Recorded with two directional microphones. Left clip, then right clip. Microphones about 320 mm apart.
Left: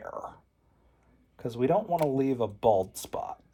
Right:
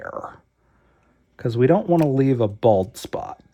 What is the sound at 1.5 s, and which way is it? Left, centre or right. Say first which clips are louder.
Speech: right 8 dB; right.